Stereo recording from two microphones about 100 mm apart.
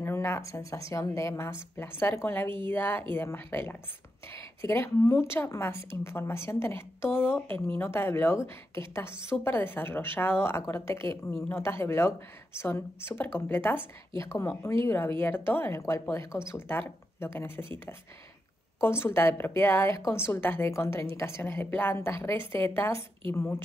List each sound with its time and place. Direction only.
0.0 s a woman's voice: 25° left (ahead or behind)
18.8 s a woman's voice: 25° left (ahead or behind)